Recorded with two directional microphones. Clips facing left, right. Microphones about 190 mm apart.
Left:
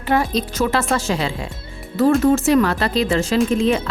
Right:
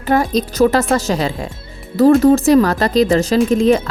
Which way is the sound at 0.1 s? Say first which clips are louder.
Right 4 dB; 40° right (ahead or behind).